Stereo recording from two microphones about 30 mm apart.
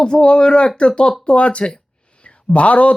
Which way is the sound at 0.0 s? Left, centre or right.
Left.